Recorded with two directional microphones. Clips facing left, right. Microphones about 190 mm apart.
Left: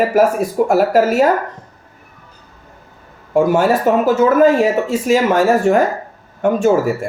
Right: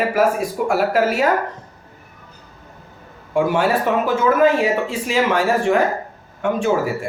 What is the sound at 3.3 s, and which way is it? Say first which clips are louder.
Speech: left 4 dB; 45° left (ahead or behind).